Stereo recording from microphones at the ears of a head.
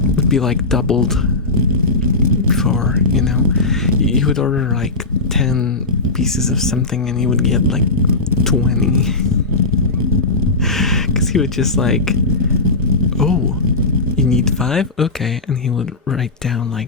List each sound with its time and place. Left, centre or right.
0.2 s speech: left
2.0 s vehicle: left
8.6 s speech: left
11.3 s speech: left
12.6 s vehicle: left